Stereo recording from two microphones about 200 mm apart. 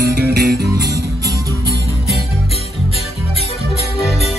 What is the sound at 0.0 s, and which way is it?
Music, 55° right (ahead or behind).